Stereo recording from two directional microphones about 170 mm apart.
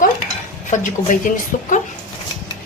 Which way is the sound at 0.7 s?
45° left (ahead or behind).